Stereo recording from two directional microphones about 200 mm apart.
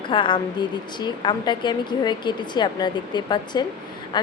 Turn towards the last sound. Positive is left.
turn(degrees=20)  # may be behind; listen again after turning